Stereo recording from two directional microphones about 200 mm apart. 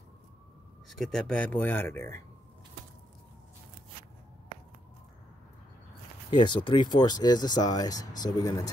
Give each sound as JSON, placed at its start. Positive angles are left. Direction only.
{"t": 0.8, "sound": "speech", "side_deg": 0}
{"t": 6.3, "sound": "speech", "side_deg": 25}